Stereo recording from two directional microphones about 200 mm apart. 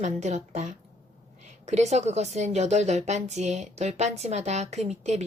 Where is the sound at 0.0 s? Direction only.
35° right (ahead or behind).